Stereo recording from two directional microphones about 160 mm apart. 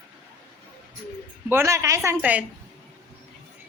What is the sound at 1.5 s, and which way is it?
Speech, 15° right (ahead or behind).